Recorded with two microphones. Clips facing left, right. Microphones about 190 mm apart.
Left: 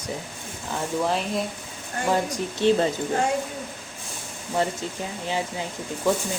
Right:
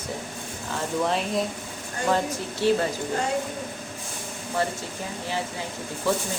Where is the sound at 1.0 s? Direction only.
Centre (ahead or behind).